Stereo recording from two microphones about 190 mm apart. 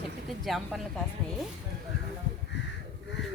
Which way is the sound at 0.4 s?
Centre (ahead or behind).